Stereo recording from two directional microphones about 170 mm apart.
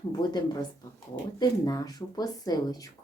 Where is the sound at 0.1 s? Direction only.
25° left (ahead or behind).